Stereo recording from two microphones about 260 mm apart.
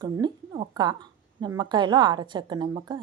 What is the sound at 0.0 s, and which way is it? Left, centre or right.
A woman's voice, centre.